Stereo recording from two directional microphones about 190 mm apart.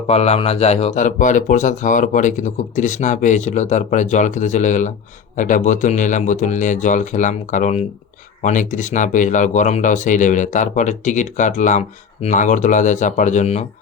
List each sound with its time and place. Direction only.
0.1 s speech: 35° left (ahead or behind)